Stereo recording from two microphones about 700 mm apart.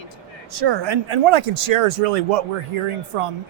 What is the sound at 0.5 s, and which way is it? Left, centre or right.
Speech, right.